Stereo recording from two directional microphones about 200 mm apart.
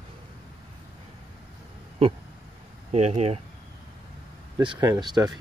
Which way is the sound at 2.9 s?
35° right (ahead or behind).